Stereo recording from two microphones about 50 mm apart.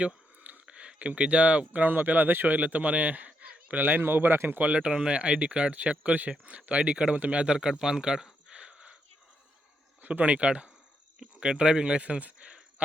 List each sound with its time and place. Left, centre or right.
0.0 s a sound: right
0.7 s a man's voice: centre; by 4.6 s right
4.6 s speech: right
10.0 s speech: right